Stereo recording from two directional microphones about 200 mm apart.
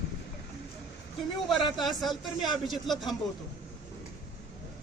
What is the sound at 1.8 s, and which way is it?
Speech, centre (ahead or behind).